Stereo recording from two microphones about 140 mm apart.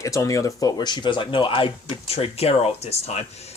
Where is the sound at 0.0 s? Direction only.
25° left (ahead or behind).